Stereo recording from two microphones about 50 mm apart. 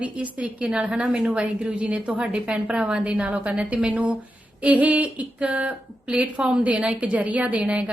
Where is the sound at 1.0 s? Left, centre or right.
Centre.